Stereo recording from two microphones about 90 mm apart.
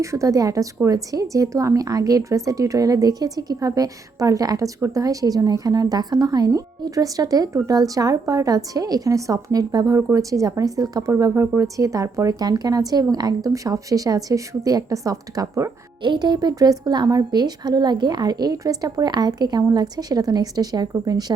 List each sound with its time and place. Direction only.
0.0 s speech: 35° right (ahead or behind)
11.1 s speech: 30° right (ahead or behind)
16.0 s speech: 50° right (ahead or behind)